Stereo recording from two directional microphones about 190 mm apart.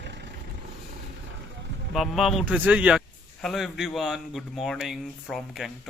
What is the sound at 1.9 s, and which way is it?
Speech, centre (ahead or behind).